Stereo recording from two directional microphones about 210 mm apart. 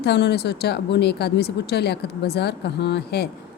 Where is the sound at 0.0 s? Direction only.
50° left (ahead or behind).